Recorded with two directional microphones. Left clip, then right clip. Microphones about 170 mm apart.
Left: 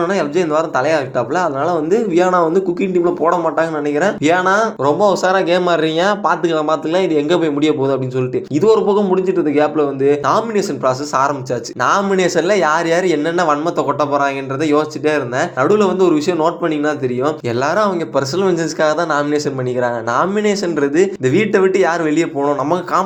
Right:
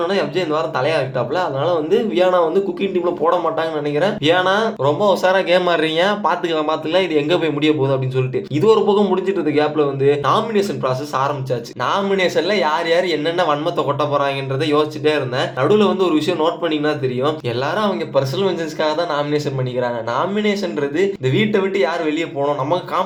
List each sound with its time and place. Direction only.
0.0 s speech: 45° left (ahead or behind)